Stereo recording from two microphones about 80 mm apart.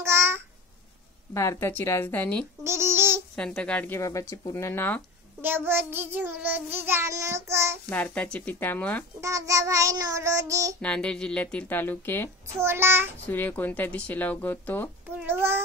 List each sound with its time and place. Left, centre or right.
0.0 s babbling: right
1.3 s speech: left
2.6 s a sound: right
3.3 s music: centre
3.9 s speech: left
5.4 s child singing: right
7.1 s child singing: right
7.9 s speech: centre
9.2 s child singing: right
10.8 s music: centre
11.7 s speech: left
12.5 s child singing: right
13.3 s speech: left
15.2 s child singing: right